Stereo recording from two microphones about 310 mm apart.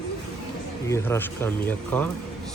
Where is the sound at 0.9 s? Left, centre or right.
Centre.